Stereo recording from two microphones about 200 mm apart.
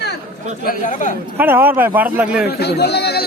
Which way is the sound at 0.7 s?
40° left (ahead or behind).